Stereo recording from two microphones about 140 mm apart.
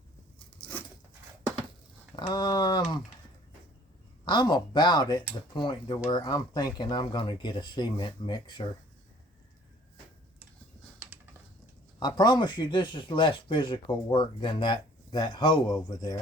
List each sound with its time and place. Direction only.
2.1 s speech: 30° left (ahead or behind)
4.3 s speech: 30° left (ahead or behind)
11.9 s speech: 30° left (ahead or behind)